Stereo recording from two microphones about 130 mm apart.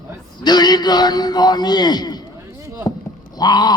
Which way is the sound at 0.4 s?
35° left (ahead or behind).